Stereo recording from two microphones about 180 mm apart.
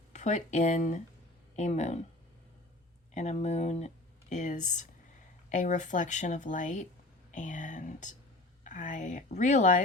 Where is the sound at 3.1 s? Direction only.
40° left (ahead or behind).